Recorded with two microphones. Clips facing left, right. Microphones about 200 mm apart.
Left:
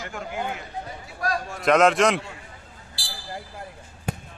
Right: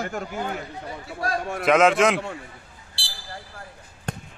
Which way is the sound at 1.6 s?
Centre (ahead or behind).